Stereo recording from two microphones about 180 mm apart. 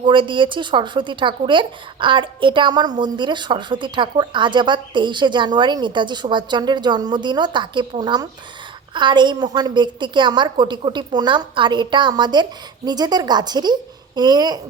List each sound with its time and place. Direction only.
0.0 s speech: 25° right (ahead or behind)